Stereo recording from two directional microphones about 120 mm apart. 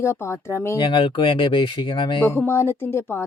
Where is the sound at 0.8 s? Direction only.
40° left (ahead or behind).